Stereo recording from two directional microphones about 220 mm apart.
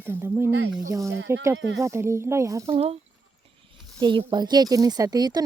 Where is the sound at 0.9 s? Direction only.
15° right (ahead or behind).